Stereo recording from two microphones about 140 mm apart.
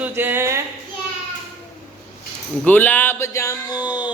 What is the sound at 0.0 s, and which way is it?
Speech, 15° right (ahead or behind).